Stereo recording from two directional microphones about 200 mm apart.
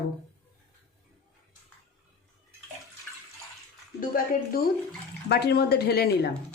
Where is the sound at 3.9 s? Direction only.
45° left (ahead or behind).